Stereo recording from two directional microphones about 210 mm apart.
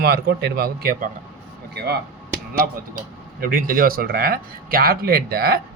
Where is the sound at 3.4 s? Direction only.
45° right (ahead or behind).